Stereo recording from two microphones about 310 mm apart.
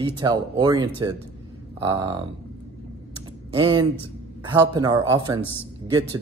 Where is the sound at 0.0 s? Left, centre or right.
Centre.